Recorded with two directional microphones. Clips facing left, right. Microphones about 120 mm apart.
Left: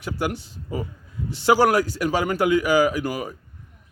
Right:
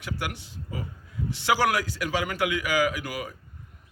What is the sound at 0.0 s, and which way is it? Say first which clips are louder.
A man's voice: left 7 dB; 40° left (ahead or behind).